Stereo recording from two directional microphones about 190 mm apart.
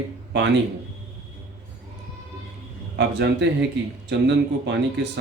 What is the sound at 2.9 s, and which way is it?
A man's voice, 65° right (ahead or behind).